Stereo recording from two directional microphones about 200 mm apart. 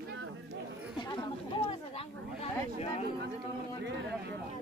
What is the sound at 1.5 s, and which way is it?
Speech, 25° left (ahead or behind).